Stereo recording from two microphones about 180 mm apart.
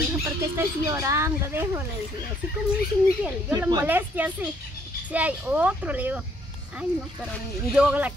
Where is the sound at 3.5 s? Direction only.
15° right (ahead or behind).